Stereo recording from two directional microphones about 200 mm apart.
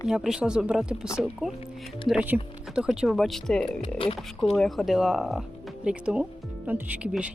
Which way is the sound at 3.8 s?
25° left (ahead or behind).